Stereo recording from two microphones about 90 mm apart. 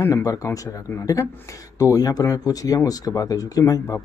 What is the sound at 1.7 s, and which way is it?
Speech, 40° left (ahead or behind).